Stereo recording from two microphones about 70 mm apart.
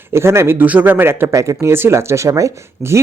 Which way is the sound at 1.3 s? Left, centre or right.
Right.